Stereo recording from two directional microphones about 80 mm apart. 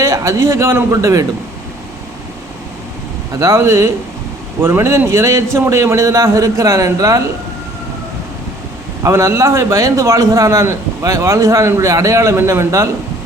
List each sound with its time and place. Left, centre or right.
0.0 s a man's voice: right
3.3 s a man's voice: right
9.0 s a man's voice: right